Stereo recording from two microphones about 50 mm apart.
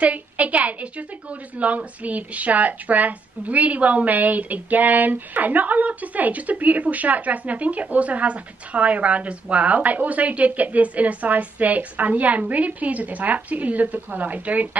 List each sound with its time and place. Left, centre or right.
0.0 s a woman's voice: right